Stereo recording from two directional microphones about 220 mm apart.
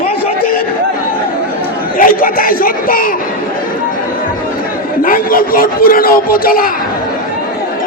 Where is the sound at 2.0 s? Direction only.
40° left (ahead or behind).